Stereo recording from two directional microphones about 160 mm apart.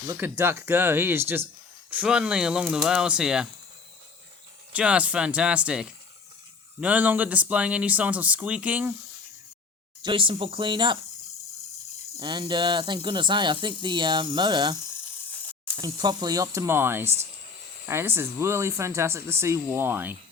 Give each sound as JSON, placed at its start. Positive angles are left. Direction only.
{"t": 0.1, "sound": "speech", "side_deg": -15}
{"t": 4.7, "sound": "speech", "side_deg": -5}
{"t": 10.0, "sound": "speech", "side_deg": -30}
{"t": 12.2, "sound": "speech", "side_deg": -30}
{"t": 16.0, "sound": "speech", "side_deg": -25}